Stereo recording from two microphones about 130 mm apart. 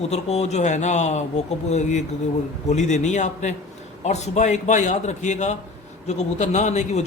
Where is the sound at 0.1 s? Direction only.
55° left (ahead or behind).